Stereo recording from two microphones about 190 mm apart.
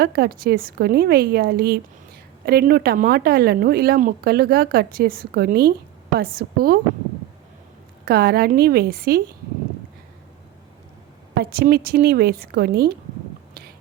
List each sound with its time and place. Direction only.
0.0 s speech: 55° right (ahead or behind)
8.0 s speech: 55° right (ahead or behind)
11.3 s speech: 55° right (ahead or behind)
13.5 s a sound: 55° right (ahead or behind)